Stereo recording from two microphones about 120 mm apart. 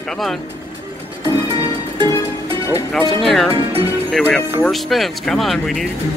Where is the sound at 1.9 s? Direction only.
40° right (ahead or behind).